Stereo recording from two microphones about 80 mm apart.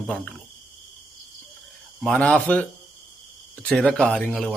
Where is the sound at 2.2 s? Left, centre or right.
Centre.